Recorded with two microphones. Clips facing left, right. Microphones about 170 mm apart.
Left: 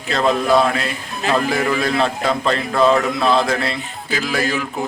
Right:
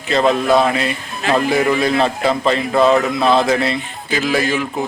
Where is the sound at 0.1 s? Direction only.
Centre (ahead or behind).